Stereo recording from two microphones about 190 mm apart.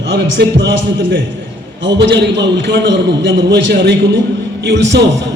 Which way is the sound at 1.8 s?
70° right (ahead or behind).